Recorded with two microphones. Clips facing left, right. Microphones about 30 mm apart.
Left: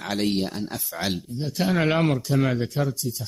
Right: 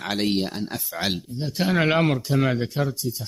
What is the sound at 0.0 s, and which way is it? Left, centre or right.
Speech, centre.